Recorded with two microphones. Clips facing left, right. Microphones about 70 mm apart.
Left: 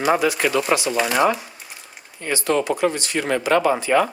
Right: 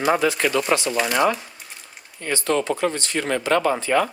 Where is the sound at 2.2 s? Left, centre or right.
Centre.